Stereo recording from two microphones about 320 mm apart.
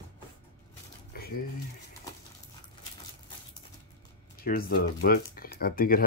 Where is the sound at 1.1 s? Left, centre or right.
Left.